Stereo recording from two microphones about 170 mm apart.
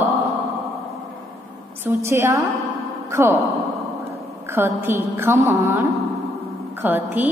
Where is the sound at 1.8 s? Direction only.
15° right (ahead or behind).